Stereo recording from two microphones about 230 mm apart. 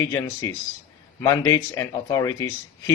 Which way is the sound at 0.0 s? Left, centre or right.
Centre.